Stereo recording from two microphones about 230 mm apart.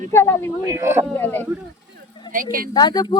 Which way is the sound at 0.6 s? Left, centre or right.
Centre.